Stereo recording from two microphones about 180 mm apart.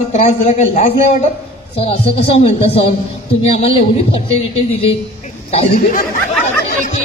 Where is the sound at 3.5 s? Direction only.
35° left (ahead or behind).